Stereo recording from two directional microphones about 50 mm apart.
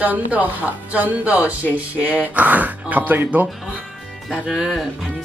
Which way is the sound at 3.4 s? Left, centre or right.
Centre.